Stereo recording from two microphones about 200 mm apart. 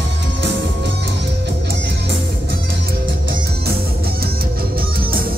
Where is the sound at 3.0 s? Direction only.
45° right (ahead or behind).